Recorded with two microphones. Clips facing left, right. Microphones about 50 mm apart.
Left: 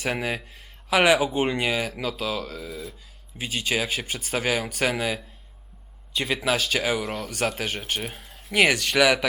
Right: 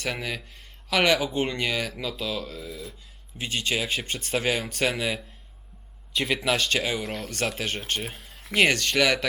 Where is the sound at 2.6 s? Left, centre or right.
Left.